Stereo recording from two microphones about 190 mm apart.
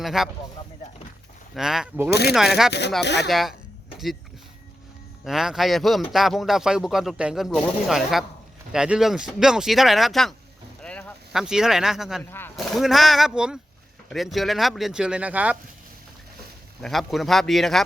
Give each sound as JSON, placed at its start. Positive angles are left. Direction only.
{"t": 0.0, "sound": "speech", "side_deg": 0}
{"t": 1.5, "sound": "a man's voice", "side_deg": -5}
{"t": 2.0, "sound": "speech", "side_deg": 60}
{"t": 3.2, "sound": "a man's voice", "side_deg": 0}
{"t": 3.9, "sound": "a sound", "side_deg": 0}
{"t": 5.2, "sound": "a man's voice", "side_deg": 0}
{"t": 12.2, "sound": "speech", "side_deg": 10}
{"t": 12.5, "sound": "a man's voice", "side_deg": 0}
{"t": 16.8, "sound": "a man's voice", "side_deg": 0}